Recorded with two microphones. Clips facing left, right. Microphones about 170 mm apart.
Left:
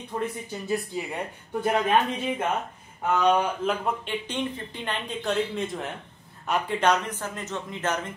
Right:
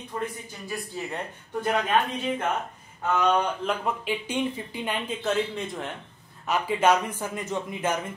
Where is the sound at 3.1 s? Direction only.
10° left (ahead or behind).